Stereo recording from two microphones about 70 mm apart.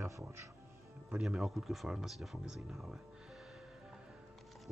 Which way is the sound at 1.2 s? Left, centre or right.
Centre.